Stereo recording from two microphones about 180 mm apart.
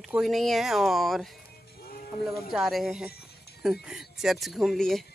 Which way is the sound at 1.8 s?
55° left (ahead or behind).